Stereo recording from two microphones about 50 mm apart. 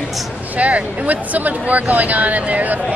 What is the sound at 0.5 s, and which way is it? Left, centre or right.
Speech, right.